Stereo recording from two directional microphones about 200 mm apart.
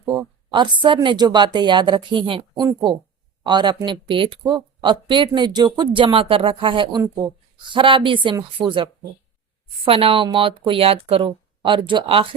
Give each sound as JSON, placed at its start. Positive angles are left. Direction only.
{"t": 0.0, "sound": "speech", "side_deg": -20}